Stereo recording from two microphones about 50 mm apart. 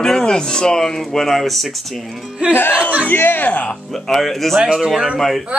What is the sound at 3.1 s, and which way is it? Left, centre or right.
Speech, left.